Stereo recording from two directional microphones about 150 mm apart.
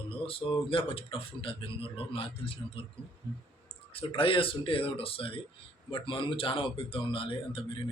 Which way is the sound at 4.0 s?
35° left (ahead or behind).